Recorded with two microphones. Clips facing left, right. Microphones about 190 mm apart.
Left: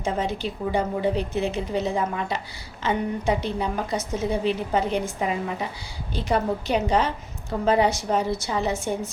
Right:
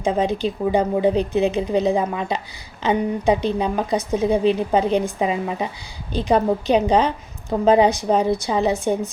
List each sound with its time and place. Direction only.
0.0 s a woman's voice: 15° right (ahead or behind)